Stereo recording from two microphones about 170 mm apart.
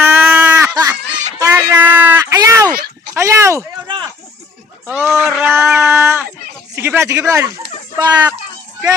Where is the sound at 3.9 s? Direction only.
25° right (ahead or behind).